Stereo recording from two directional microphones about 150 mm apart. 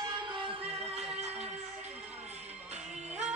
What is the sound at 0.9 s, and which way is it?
Music, 45° right (ahead or behind).